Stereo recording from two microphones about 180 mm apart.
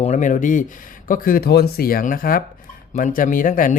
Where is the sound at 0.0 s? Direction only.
40° left (ahead or behind).